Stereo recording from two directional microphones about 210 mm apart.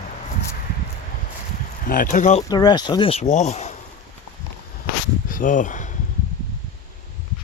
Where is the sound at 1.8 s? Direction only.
40° left (ahead or behind).